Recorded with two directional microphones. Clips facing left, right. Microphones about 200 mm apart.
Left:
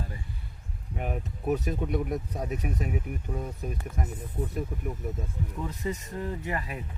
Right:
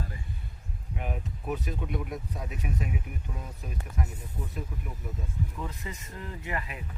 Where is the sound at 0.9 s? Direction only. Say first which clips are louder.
Left 3 dB; 45° left (ahead or behind).